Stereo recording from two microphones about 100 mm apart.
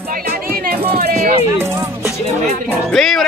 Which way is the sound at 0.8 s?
75° right (ahead or behind).